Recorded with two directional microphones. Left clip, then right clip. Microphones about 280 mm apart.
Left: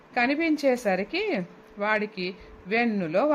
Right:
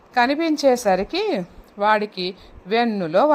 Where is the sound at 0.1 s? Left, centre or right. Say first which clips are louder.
Right 5 dB; centre.